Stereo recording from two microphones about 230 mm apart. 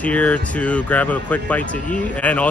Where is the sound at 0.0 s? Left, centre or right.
Centre.